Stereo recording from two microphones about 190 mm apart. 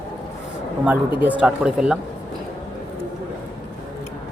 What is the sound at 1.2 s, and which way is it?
Speech, 5° right (ahead or behind).